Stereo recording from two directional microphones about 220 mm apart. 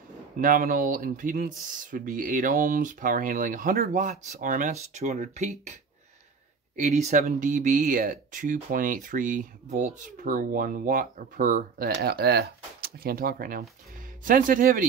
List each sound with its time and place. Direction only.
0.4 s speech: 40° right (ahead or behind)
6.8 s speech: 30° right (ahead or behind)